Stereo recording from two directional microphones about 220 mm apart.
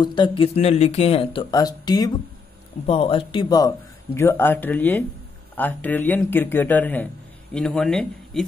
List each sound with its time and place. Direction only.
0.0 s a man's voice: 20° left (ahead or behind); by 8.5 s 5° left (ahead or behind)